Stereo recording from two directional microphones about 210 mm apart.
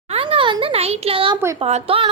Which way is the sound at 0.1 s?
25° right (ahead or behind).